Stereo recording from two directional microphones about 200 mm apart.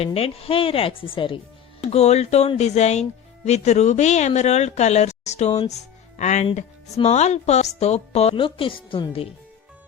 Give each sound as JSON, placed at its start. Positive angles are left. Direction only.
{"t": 0.0, "sound": "a woman's voice", "side_deg": 30}